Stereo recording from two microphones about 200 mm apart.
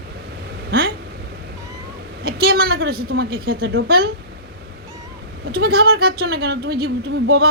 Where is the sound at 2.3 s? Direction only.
50° right (ahead or behind).